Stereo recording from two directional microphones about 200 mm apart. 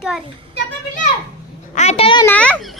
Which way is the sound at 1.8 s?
30° left (ahead or behind).